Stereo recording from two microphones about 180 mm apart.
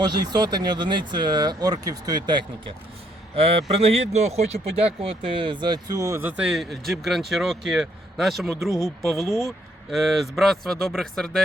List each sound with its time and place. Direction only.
0.0 s speech: 20° right (ahead or behind)
3.3 s speech: 30° right (ahead or behind); by 8.5 s centre (ahead or behind)
8.7 s speech: 20° left (ahead or behind)
9.0 s speech: centre (ahead or behind)